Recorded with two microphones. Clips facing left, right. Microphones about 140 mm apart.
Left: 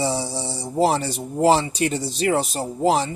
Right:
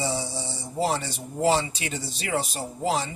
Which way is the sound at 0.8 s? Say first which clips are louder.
Left 6 dB; 50° left (ahead or behind).